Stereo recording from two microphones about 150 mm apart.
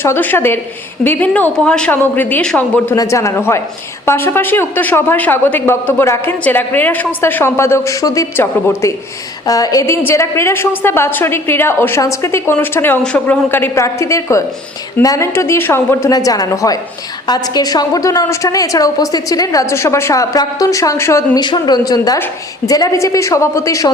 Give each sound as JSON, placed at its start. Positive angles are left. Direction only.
{"t": 0.0, "sound": "speech", "side_deg": 15}
{"t": 2.9, "sound": "a woman's voice", "side_deg": 20}